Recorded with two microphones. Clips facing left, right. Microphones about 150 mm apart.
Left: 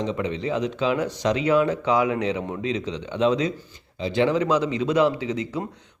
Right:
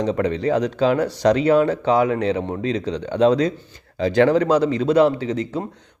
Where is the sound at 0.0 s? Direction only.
40° right (ahead or behind).